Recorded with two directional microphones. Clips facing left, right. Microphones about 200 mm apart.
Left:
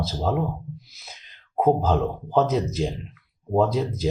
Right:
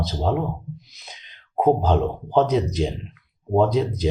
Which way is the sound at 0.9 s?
5° left (ahead or behind).